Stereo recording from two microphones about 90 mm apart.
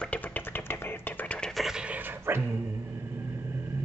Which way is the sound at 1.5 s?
5° right (ahead or behind).